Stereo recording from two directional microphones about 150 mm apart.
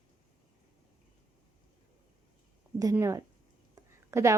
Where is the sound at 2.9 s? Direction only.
20° right (ahead or behind).